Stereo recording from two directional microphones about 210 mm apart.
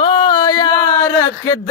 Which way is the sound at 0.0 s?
20° left (ahead or behind).